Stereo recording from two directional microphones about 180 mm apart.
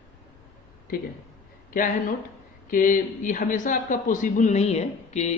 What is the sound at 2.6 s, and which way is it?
Speech, 50° left (ahead or behind).